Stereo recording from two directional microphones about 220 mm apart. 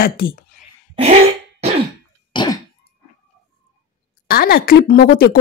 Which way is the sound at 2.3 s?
20° left (ahead or behind).